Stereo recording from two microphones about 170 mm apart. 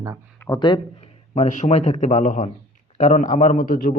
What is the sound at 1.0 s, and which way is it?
A man's voice, 45° left (ahead or behind).